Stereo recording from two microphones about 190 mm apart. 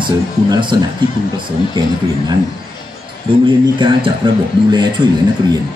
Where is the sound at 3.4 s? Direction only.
25° right (ahead or behind).